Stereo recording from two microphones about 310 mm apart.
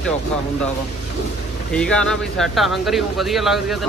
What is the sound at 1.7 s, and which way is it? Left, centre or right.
Speech, centre.